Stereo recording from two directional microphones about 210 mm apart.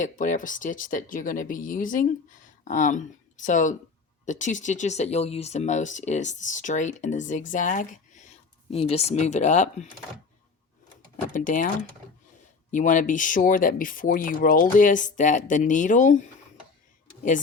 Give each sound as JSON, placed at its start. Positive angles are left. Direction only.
{"t": 0.0, "sound": "speech", "side_deg": 40}
{"t": 11.3, "sound": "speech", "side_deg": 40}
{"t": 12.7, "sound": "speech", "side_deg": 40}